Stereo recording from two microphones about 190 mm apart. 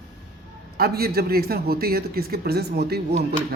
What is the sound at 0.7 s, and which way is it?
A man's voice, 55° right (ahead or behind).